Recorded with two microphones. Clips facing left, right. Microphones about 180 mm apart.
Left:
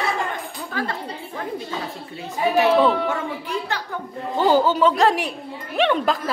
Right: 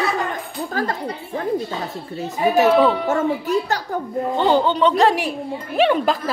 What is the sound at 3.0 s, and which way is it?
Speech, 45° right (ahead or behind).